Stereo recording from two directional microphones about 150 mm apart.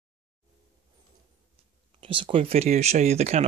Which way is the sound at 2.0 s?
35° right (ahead or behind).